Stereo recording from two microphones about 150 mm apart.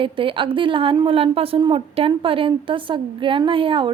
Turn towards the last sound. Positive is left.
turn(degrees=-35)  # may be behind; listen again after turning